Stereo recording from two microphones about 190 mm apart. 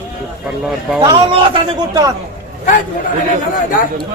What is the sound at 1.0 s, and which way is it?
A man's voice, 20° right (ahead or behind).